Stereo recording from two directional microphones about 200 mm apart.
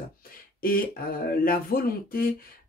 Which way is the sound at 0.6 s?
45° left (ahead or behind).